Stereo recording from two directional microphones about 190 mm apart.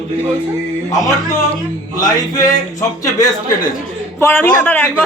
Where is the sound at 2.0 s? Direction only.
20° left (ahead or behind).